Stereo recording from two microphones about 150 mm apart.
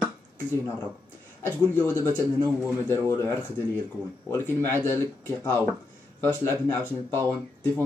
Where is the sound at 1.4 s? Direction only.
15° left (ahead or behind).